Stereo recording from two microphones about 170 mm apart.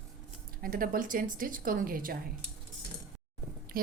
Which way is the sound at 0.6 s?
55° right (ahead or behind).